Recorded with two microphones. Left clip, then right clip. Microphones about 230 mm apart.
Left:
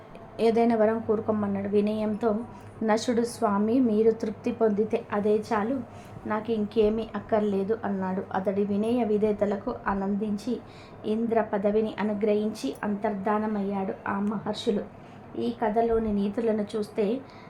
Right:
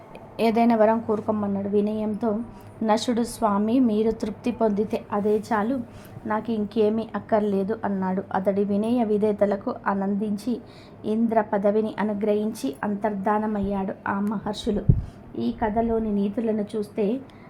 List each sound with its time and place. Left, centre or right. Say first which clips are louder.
0.3 s a woman's voice: right 2 dB; centre